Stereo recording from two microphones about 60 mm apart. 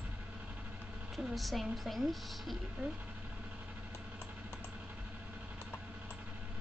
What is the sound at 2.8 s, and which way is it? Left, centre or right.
Speech, right.